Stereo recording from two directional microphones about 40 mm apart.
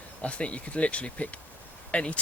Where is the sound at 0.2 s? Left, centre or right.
Left.